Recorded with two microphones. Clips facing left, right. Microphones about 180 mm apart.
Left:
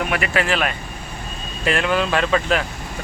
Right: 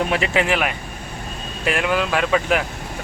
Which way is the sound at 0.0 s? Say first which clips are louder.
Right 2 dB; 25° right (ahead or behind).